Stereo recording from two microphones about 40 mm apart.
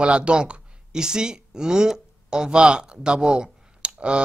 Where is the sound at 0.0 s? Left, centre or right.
Right.